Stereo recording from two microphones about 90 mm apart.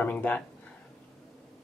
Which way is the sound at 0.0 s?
20° left (ahead or behind).